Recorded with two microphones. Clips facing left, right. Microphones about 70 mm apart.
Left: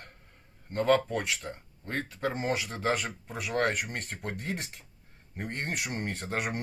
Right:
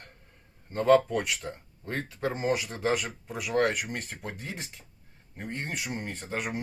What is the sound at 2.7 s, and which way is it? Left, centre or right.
Speech, left.